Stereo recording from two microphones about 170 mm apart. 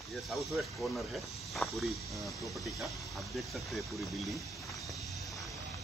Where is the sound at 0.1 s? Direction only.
Centre (ahead or behind).